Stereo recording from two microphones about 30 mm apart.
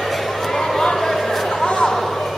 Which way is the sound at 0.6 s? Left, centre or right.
Centre.